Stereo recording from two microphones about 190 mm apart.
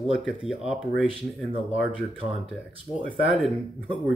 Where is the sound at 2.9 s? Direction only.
20° right (ahead or behind).